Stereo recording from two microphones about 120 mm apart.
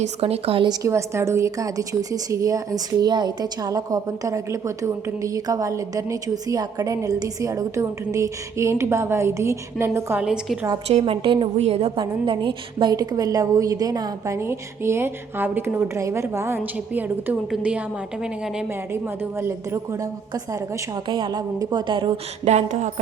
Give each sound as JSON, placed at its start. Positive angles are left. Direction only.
{"t": 0.0, "sound": "speech", "side_deg": -55}
{"t": 0.7, "sound": "a woman's voice", "side_deg": -25}
{"t": 10.2, "sound": "a woman's voice", "side_deg": -5}
{"t": 10.8, "sound": "speech", "side_deg": -55}
{"t": 11.5, "sound": "a woman's voice", "side_deg": -65}
{"t": 11.9, "sound": "a woman's voice", "side_deg": -45}
{"t": 19.4, "sound": "a woman's voice", "side_deg": -25}
{"t": 22.4, "sound": "a woman's voice", "side_deg": -70}